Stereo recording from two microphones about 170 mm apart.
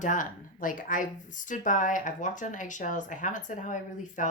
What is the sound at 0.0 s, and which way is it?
Speech, 50° left (ahead or behind).